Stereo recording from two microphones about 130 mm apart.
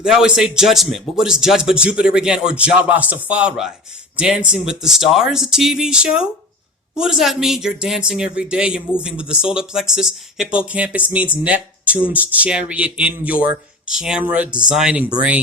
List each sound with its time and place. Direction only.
0.0 s a man's voice: 5° right (ahead or behind)